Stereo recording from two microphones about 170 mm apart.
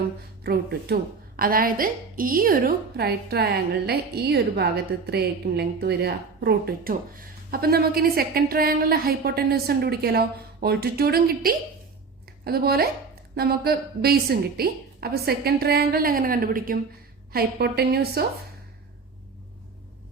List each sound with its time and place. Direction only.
0.4 s speech: 70° right (ahead or behind)
1.4 s a woman's voice: 55° right (ahead or behind)
17.3 s a woman's voice: 70° right (ahead or behind)